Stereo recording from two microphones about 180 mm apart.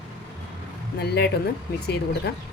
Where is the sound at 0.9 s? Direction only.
65° left (ahead or behind).